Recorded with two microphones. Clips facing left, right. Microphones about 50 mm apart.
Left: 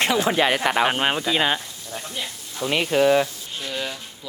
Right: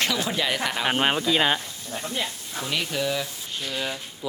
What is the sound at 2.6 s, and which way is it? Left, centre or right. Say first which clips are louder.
Speech: left 8 dB; left.